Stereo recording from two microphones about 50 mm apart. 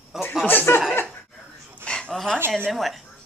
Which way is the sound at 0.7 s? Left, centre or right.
Left.